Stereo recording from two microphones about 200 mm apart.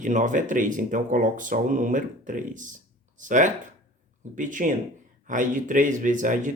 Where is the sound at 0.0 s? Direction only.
40° right (ahead or behind).